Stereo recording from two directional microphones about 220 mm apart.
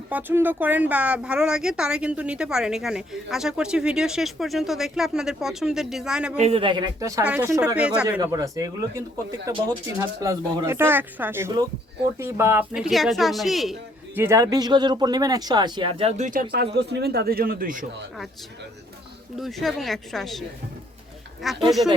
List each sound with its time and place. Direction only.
0.1 s speech: 10° right (ahead or behind)
6.3 s speech: 30° right (ahead or behind); by 13.7 s centre (ahead or behind)
14.2 s speech: 15° right (ahead or behind); by 17.8 s 40° right (ahead or behind)
19.4 s speech: centre (ahead or behind)
21.4 s speech: centre (ahead or behind)